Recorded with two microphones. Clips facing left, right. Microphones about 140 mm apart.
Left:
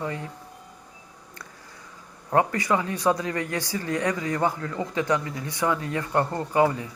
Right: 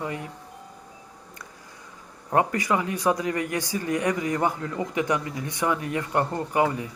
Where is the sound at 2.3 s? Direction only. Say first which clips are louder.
Left 1 dB; 20° right (ahead or behind).